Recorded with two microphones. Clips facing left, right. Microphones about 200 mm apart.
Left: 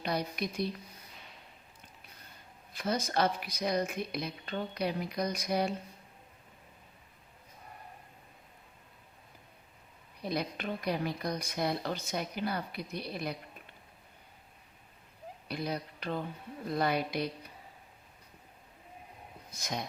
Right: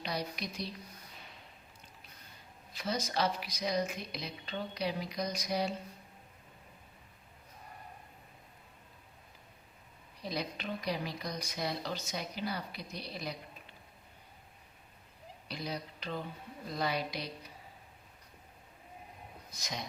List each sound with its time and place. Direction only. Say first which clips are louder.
0.0 s a woman's voice: left 4 dB; 55° left (ahead or behind)
2.7 s a woman's voice: left 3 dB; 55° left (ahead or behind)
10.2 s speech: left 3 dB; 55° left (ahead or behind)
15.4 s speech: left 4 dB; 55° left (ahead or behind)
19.5 s speech: left 5 dB; 55° left (ahead or behind)